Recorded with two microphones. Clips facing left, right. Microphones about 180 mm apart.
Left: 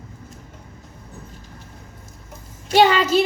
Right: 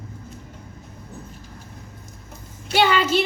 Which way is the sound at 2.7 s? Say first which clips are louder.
Left 4 dB; 40° left (ahead or behind).